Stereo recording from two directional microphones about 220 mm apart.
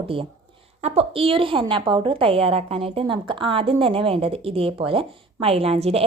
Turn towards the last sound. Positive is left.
turn(degrees=-25)  # may be behind; listen again after turning